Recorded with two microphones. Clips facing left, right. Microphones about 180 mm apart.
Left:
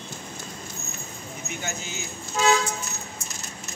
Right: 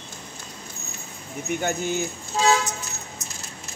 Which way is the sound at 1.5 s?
55° right (ahead or behind).